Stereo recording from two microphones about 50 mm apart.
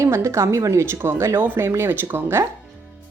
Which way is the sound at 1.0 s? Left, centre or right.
Right.